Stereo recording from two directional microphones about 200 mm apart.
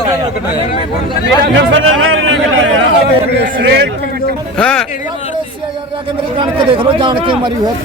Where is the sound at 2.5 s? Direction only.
75° right (ahead or behind).